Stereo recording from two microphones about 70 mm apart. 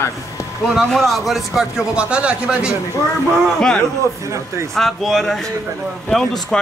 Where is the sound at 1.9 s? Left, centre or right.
Centre.